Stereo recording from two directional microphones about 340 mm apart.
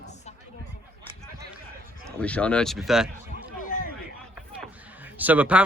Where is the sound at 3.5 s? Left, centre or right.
Left.